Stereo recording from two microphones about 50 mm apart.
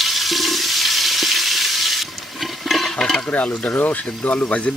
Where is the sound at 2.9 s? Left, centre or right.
Centre.